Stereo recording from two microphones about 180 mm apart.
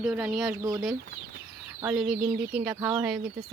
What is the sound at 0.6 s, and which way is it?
Speech, 20° right (ahead or behind).